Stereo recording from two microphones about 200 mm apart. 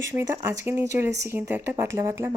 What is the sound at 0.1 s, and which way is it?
Speech, 15° right (ahead or behind).